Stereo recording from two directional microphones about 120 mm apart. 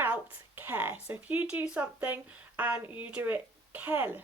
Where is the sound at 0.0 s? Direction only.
15° right (ahead or behind).